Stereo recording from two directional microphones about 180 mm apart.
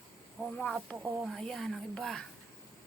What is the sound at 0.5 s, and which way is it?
Speech, 5° left (ahead or behind).